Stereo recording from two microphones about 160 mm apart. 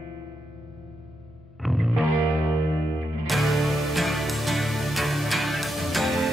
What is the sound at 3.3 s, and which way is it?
Music, centre (ahead or behind).